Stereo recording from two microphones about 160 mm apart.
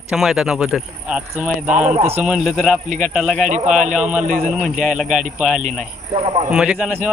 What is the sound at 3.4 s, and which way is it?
Speech, 50° right (ahead or behind).